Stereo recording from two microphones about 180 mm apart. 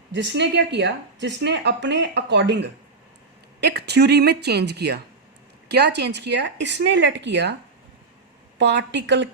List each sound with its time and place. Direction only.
0.1 s a woman's voice: 80° right
8.5 s speech: 80° right